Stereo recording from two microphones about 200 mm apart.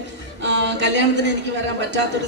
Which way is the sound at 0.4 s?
60° right (ahead or behind).